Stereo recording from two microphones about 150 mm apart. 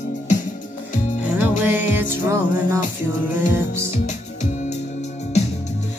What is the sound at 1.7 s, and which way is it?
Music, 15° right (ahead or behind).